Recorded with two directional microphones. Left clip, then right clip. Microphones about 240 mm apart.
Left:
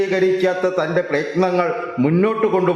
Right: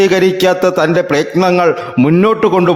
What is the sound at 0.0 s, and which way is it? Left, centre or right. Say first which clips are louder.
A man's voice: right 7 dB; right.